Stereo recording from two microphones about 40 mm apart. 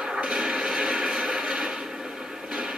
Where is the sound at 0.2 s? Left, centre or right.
Right.